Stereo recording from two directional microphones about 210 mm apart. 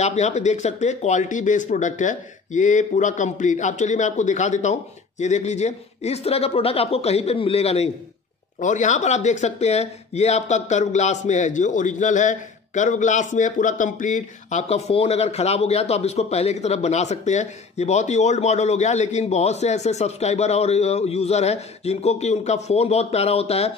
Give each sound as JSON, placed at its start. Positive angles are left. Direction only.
{"t": 0.0, "sound": "a man's voice", "side_deg": 35}